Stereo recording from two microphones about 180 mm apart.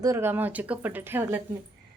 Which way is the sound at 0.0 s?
15° right (ahead or behind).